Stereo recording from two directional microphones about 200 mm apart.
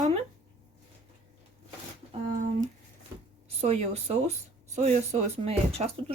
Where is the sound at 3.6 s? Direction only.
35° right (ahead or behind).